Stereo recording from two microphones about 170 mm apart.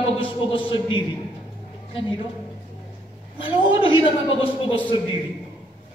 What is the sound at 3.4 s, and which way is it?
A man's voice, 30° left (ahead or behind).